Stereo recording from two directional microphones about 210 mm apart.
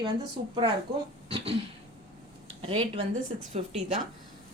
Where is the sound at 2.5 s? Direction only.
25° right (ahead or behind).